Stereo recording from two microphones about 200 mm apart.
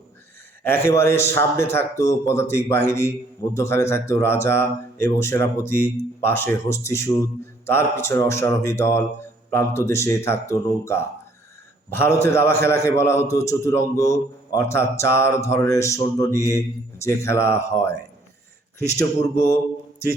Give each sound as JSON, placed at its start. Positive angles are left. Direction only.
{"t": 0.6, "sound": "a man's voice", "side_deg": 10}
{"t": 18.9, "sound": "a man's voice", "side_deg": 15}